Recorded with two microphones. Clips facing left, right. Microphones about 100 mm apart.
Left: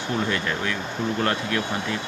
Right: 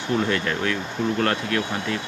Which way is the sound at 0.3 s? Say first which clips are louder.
Right 2 dB; 10° left (ahead or behind).